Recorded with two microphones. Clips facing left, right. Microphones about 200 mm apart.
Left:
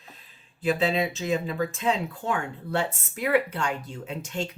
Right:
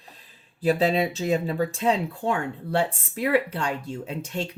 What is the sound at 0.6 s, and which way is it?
Speech, 35° right (ahead or behind).